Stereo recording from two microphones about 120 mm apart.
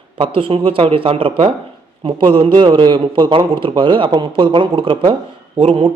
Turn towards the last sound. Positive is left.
turn(degrees=-50)  # may be behind; listen again after turning